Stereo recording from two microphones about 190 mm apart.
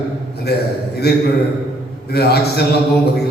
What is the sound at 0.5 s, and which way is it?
A man's voice, 55° left (ahead or behind).